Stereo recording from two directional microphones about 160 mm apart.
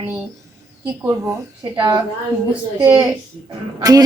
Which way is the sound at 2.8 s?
15° right (ahead or behind).